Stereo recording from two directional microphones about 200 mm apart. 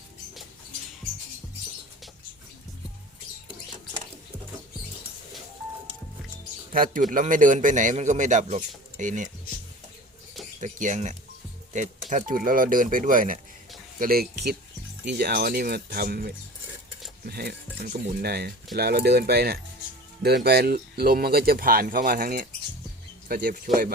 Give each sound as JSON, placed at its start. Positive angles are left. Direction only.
{"t": 6.7, "sound": "a man's voice", "side_deg": -45}
{"t": 10.6, "sound": "a man's voice", "side_deg": -40}